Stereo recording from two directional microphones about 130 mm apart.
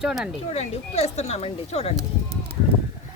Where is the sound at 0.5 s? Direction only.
55° left (ahead or behind).